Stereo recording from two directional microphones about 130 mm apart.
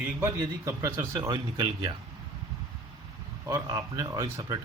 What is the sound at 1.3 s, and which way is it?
Speech, 35° right (ahead or behind).